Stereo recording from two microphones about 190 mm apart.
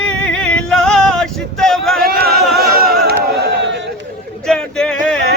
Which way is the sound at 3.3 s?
60° right (ahead or behind).